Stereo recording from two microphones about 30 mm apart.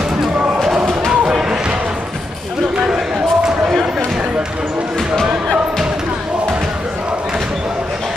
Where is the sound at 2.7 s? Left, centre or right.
Right.